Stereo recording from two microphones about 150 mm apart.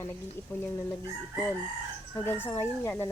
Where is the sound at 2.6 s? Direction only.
15° left (ahead or behind).